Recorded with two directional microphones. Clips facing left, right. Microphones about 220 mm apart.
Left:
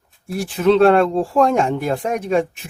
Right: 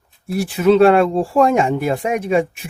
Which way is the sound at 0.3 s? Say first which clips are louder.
Right 2 dB; 5° right (ahead or behind).